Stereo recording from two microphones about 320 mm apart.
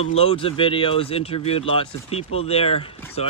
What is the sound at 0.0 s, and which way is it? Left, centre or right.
Speech, centre.